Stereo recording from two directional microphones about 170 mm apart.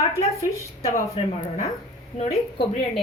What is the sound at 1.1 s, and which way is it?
Speech, 35° left (ahead or behind).